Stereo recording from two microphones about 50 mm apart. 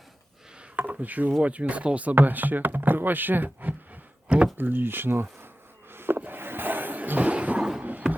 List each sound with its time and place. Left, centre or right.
0.8 s wood: right
1.4 s speech: right
5.9 s a sound: right